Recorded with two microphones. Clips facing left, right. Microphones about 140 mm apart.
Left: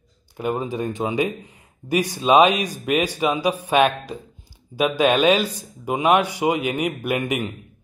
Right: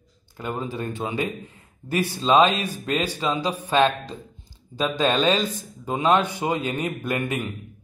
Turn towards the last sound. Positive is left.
turn(degrees=15)  # may be behind; listen again after turning